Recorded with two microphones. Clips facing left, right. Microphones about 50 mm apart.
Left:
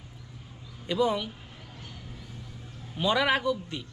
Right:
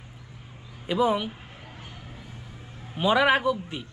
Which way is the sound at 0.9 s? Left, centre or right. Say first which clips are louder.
Right 3 dB; centre.